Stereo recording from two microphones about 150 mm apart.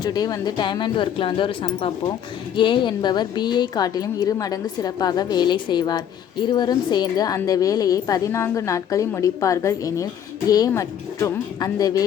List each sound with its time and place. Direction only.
0.0 s a woman's voice: 25° left (ahead or behind)